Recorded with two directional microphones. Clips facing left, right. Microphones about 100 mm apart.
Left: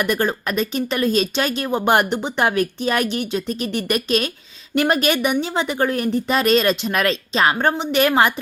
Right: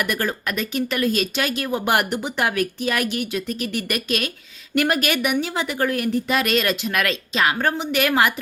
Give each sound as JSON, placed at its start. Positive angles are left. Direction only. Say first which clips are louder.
{"t": 0.0, "sound": "speech", "louder": "left 4 dB", "side_deg": 25}